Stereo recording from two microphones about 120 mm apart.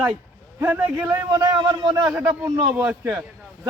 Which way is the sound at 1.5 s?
40° right (ahead or behind).